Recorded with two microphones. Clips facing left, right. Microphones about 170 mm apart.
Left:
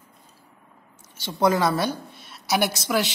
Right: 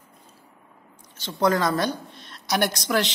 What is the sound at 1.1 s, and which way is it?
A woman's voice, 10° left (ahead or behind).